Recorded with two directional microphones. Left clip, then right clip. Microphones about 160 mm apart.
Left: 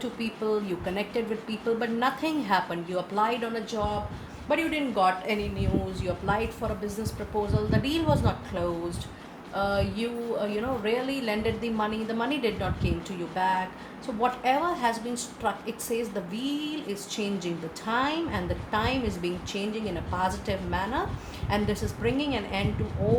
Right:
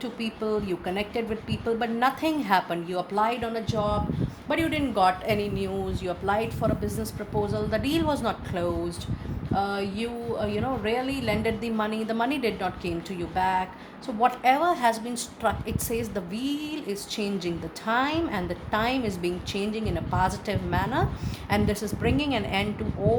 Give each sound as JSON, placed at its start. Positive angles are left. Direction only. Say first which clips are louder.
{"t": 0.0, "sound": "a woman's voice", "louder": "even", "side_deg": -45}
{"t": 4.4, "sound": "a woman's voice", "louder": "even", "side_deg": -60}
{"t": 6.0, "sound": "a woman's voice", "louder": "right 3 dB", "side_deg": -50}